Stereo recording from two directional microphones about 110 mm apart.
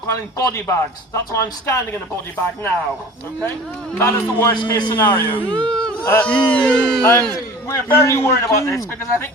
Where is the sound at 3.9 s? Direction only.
15° left (ahead or behind).